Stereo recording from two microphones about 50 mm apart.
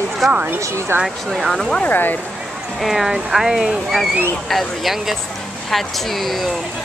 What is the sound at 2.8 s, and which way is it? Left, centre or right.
Speech, centre.